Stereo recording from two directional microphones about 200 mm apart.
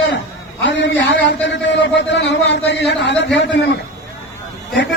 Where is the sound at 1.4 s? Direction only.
65° left (ahead or behind).